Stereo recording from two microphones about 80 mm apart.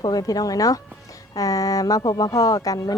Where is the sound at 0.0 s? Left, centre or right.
Left.